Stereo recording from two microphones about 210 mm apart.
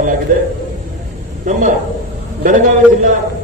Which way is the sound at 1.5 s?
40° right (ahead or behind).